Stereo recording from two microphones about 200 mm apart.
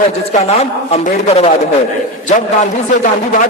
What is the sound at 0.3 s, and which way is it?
A man's voice, 35° left (ahead or behind).